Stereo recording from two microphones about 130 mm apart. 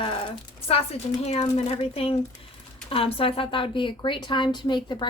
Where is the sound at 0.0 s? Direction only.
45° left (ahead or behind).